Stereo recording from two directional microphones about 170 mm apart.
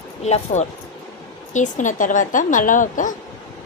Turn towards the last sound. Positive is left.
turn(degrees=50)  # may be behind; listen again after turning